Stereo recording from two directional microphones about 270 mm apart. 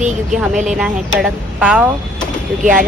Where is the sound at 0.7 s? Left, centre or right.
Centre.